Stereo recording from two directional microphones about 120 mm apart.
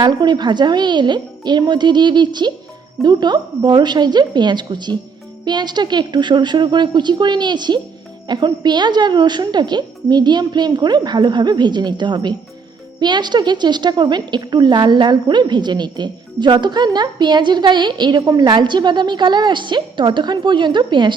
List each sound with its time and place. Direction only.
0.0 s a woman's voice: 35° right (ahead or behind)